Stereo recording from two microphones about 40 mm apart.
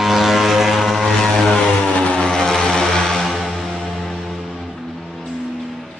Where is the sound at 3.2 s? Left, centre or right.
Centre.